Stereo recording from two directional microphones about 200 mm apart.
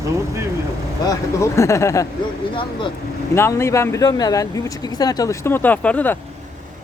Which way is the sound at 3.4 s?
15° left (ahead or behind).